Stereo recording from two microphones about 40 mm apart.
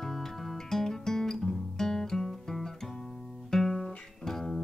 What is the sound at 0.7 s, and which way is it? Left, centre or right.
Guitar, centre.